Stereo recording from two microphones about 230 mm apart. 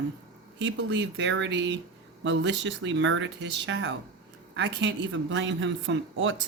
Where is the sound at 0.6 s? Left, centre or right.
Right.